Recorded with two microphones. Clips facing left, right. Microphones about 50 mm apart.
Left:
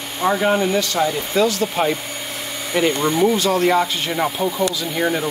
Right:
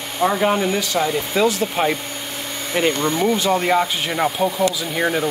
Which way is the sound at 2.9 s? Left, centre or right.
Centre.